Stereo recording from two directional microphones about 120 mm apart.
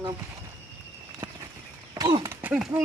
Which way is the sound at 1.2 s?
20° right (ahead or behind).